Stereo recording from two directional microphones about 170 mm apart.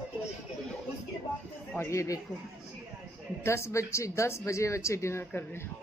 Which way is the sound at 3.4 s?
15° left (ahead or behind).